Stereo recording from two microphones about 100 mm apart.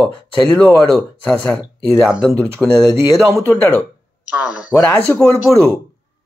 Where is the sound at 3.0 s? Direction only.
30° right (ahead or behind).